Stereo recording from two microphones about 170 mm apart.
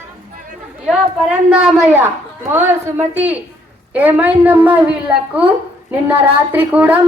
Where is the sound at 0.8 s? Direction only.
5° right (ahead or behind).